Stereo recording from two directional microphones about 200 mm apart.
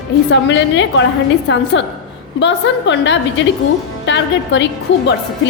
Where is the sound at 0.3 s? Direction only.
65° left (ahead or behind).